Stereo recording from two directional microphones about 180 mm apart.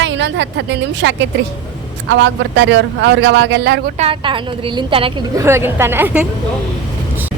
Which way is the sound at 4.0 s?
30° right (ahead or behind).